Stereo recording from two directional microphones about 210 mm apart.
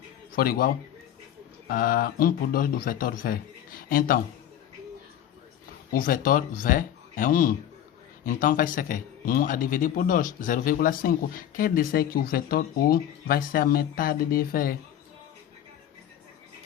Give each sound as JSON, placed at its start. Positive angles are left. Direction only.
{"t": 0.3, "sound": "speech", "side_deg": 45}
{"t": 5.9, "sound": "speech", "side_deg": 40}